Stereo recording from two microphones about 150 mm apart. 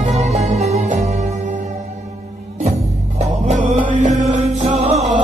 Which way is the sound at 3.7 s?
60° right (ahead or behind).